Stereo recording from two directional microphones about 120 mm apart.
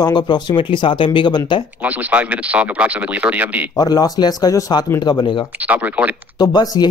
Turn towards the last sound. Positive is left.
turn(degrees=35)  # may be behind; listen again after turning